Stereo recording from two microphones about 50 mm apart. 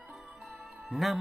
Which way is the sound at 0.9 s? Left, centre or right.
Centre.